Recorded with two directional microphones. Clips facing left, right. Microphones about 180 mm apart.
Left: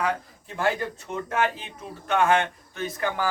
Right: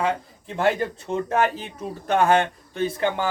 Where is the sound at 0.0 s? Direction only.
25° right (ahead or behind).